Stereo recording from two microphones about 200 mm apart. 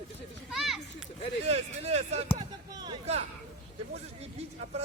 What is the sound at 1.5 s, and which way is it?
Speech, 30° right (ahead or behind).